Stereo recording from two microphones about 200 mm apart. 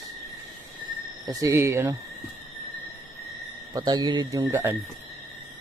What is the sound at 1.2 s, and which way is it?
Speech, 15° right (ahead or behind).